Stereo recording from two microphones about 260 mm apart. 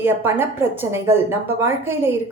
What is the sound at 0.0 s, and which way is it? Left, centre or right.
A woman's voice, centre.